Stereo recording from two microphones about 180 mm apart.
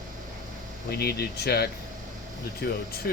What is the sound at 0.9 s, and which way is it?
Speech, 60° left (ahead or behind).